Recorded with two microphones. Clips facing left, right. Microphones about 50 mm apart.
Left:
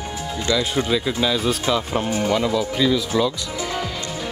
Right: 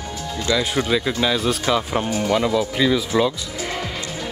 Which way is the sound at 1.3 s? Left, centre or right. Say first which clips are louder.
Right 1 dB; centre.